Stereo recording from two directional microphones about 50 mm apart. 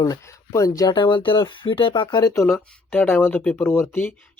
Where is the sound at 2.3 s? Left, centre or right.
Left.